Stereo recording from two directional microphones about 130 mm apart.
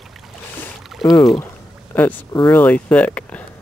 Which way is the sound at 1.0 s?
30° left (ahead or behind).